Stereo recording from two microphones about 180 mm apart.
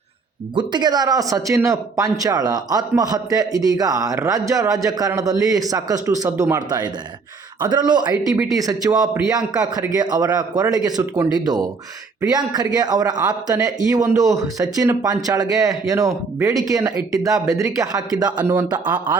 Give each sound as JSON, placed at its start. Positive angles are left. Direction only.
{"t": 0.5, "sound": "speech", "side_deg": -25}